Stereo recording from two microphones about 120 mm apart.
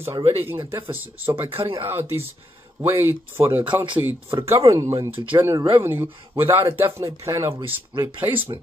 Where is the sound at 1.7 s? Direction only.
20° right (ahead or behind).